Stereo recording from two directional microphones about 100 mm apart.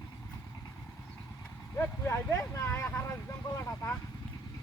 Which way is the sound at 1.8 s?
25° left (ahead or behind).